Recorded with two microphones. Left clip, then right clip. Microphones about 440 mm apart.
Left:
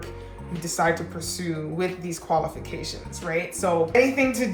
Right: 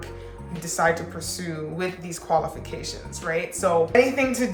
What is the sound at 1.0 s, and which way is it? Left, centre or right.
Speech, right.